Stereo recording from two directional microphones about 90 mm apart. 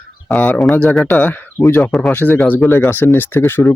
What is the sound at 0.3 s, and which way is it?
Speech, 15° left (ahead or behind).